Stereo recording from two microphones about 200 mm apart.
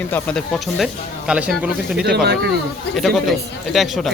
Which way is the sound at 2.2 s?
55° right (ahead or behind).